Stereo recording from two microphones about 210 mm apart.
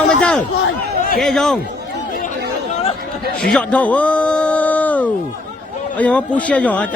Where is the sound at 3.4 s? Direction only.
5° left (ahead or behind).